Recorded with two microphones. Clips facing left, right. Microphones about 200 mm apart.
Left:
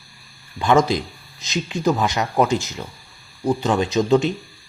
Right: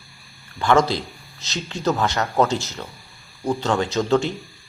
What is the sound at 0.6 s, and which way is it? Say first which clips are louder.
Speech: left 1 dB; 15° left (ahead or behind).